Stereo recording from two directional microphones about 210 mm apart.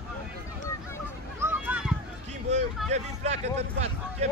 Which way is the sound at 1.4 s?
10° right (ahead or behind).